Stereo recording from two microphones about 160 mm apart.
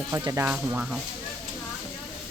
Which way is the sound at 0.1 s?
15° right (ahead or behind).